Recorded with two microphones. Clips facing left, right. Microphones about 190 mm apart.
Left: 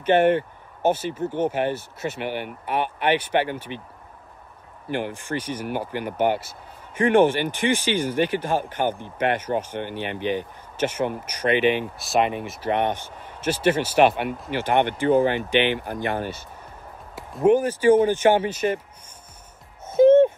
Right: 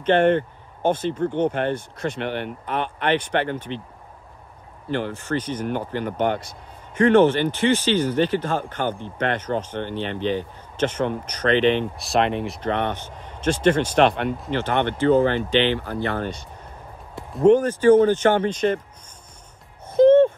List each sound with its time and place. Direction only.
0.0 s speech: 10° left (ahead or behind)
4.8 s speech: 10° left (ahead or behind)
20.1 s a sound: 10° left (ahead or behind)